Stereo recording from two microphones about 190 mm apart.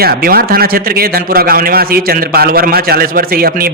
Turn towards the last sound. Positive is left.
turn(degrees=-50)  # may be behind; listen again after turning